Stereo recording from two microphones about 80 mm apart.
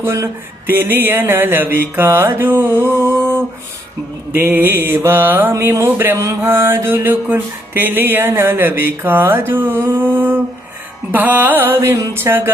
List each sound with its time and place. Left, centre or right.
0.0 s a sound: right
0.7 s mantra: right
4.4 s mantra: right